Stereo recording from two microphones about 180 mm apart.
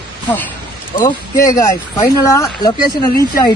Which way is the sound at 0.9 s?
20° left (ahead or behind).